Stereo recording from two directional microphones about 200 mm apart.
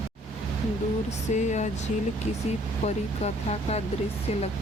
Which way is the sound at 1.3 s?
35° left (ahead or behind).